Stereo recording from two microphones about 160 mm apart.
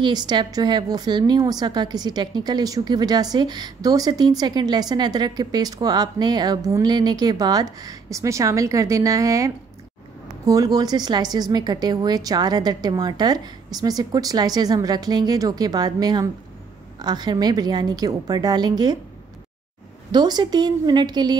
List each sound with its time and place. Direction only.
0.0 s a woman's voice: 25° right (ahead or behind)
20.1 s a woman's voice: 25° right (ahead or behind)